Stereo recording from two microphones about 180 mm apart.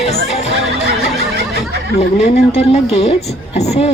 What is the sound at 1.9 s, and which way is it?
Music, 35° left (ahead or behind).